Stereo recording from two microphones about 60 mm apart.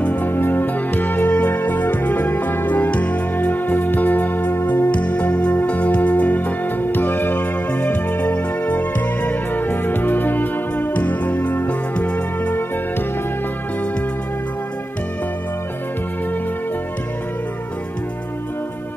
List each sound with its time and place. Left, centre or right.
0.0 s music: left
0.3 s music: left
4.9 s music: left